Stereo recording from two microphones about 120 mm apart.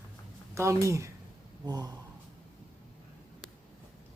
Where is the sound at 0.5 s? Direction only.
25° right (ahead or behind).